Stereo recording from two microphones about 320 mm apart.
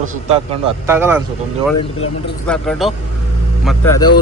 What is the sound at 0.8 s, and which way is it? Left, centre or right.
Speech, centre.